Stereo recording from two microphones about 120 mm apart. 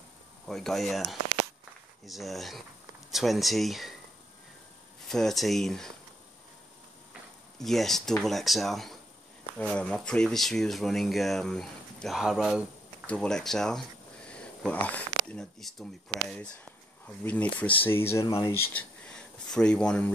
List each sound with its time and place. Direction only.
0.5 s speech: 5° left (ahead or behind)
5.0 s speech: 5° left (ahead or behind)
7.5 s speech: centre (ahead or behind)
13.0 s speech: 10° left (ahead or behind)